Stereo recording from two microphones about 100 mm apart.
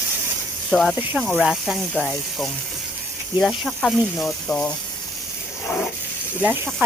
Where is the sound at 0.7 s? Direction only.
Centre (ahead or behind).